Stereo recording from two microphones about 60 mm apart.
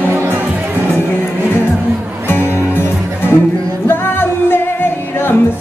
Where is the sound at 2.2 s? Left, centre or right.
Left.